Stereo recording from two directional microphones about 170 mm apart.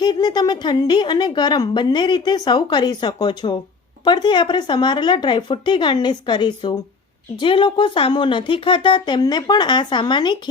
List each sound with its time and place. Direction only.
0.0 s a woman's voice: 25° left (ahead or behind)